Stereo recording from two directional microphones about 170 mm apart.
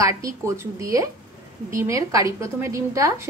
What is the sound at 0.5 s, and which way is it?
A woman's voice, 20° right (ahead or behind).